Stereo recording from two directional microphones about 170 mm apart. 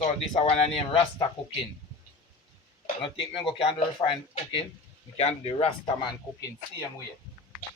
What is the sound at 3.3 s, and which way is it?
Speech, 30° left (ahead or behind).